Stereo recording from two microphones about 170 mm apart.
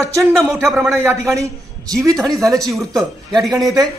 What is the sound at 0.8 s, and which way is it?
Speech, 15° right (ahead or behind).